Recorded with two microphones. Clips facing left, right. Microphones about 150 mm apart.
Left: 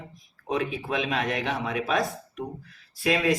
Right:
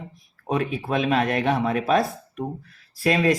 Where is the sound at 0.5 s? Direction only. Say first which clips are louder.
Right 3 dB; 50° right (ahead or behind).